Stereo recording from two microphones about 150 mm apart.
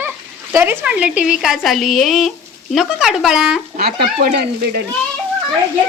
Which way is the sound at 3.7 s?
85° right.